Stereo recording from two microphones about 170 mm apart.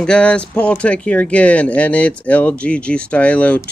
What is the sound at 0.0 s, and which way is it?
Speech, 5° left (ahead or behind).